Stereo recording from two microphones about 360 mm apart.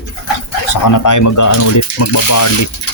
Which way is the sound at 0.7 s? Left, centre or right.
Left.